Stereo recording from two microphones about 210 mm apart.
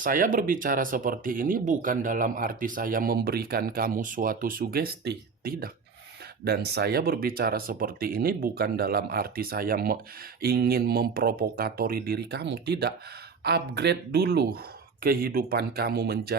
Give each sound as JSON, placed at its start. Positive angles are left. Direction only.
{"t": 0.0, "sound": "speech", "side_deg": -40}